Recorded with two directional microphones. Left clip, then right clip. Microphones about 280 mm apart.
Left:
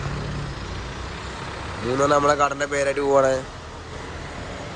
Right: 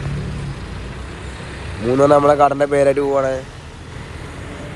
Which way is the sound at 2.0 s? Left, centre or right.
Centre.